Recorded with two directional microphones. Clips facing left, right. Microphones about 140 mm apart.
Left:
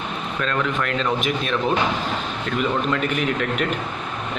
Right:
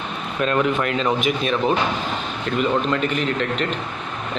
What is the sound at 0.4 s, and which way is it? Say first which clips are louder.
Speech: right 5 dB; 20° right (ahead or behind).